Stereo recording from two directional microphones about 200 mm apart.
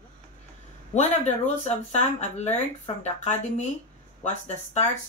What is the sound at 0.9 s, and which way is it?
Speech, 35° left (ahead or behind).